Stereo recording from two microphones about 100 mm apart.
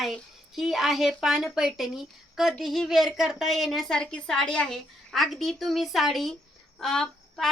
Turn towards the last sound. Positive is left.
turn(degrees=5)  # may be behind; listen again after turning